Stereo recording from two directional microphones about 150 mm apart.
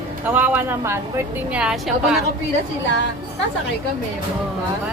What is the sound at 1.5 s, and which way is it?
Speech, 5° right (ahead or behind).